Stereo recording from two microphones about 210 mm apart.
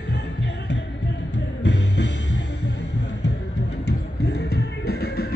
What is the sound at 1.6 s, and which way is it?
Music, 55° left (ahead or behind).